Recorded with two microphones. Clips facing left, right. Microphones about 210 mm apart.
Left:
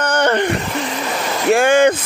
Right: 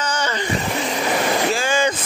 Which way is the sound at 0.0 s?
60° left (ahead or behind).